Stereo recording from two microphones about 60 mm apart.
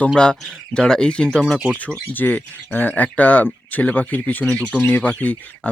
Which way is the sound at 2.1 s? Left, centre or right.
Left.